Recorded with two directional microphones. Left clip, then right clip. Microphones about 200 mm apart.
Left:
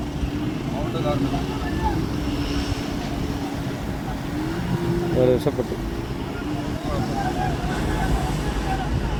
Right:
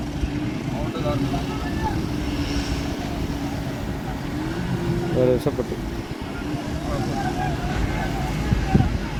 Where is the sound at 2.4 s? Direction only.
40° right (ahead or behind).